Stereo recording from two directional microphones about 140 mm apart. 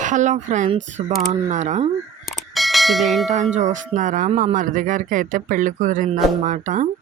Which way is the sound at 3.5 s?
60° right (ahead or behind).